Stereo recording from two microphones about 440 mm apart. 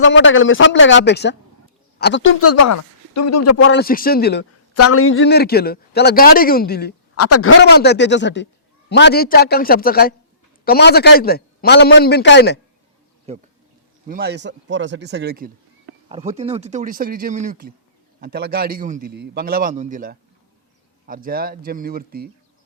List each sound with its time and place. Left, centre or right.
0.0 s speech: left
7.2 s speech: left
13.3 s a man's voice: centre